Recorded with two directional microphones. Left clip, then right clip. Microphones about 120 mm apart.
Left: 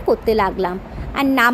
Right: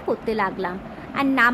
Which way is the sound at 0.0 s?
40° left (ahead or behind).